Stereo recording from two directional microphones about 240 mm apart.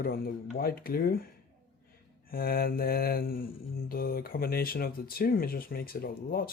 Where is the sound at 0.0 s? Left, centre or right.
Left.